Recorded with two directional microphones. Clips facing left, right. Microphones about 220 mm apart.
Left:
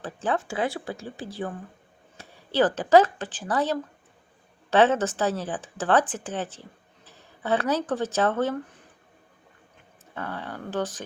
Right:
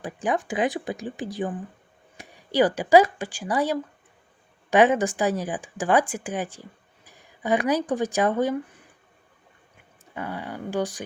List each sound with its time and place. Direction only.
0.0 s speech: 15° right (ahead or behind)
10.2 s speech: 10° right (ahead or behind)